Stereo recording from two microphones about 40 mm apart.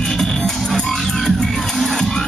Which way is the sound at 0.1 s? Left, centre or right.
Centre.